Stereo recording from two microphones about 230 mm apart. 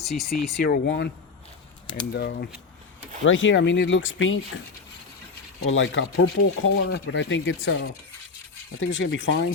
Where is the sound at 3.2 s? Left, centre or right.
Left.